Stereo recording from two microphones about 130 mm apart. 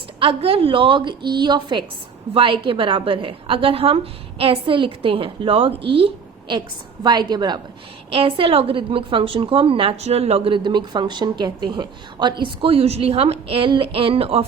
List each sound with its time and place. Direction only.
0.2 s a woman's voice: 45° right (ahead or behind)
8.1 s a woman's voice: 45° right (ahead or behind)